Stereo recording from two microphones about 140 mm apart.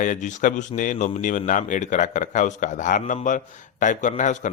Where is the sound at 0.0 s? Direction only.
65° left (ahead or behind).